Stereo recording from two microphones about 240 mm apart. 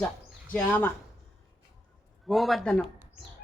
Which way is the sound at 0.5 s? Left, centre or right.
Centre.